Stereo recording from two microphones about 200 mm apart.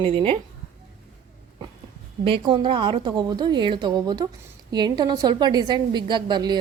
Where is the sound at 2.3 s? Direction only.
25° right (ahead or behind).